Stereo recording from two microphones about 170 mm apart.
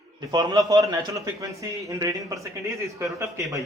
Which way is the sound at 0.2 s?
25° right (ahead or behind).